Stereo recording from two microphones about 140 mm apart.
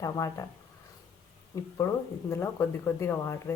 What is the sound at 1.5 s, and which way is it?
Speech, 20° left (ahead or behind).